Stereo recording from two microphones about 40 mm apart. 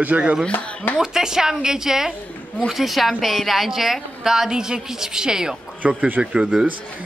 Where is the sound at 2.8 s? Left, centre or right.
Centre.